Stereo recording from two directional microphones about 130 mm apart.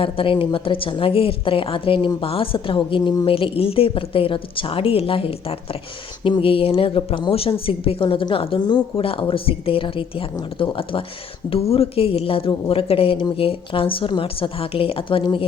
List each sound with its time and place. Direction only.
0.0 s a woman's voice: 45° left (ahead or behind)